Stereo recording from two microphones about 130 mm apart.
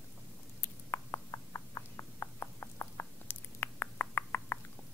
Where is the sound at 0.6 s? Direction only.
20° left (ahead or behind).